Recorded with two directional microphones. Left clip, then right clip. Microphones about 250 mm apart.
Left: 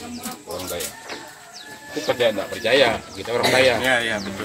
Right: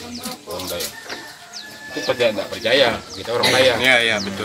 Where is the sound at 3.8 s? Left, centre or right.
Right.